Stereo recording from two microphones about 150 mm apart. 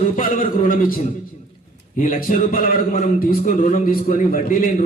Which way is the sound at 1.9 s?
65° left (ahead or behind).